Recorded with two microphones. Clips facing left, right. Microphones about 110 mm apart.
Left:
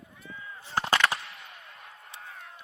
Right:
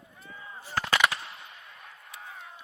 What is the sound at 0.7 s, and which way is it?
Machine gun, 30° left (ahead or behind).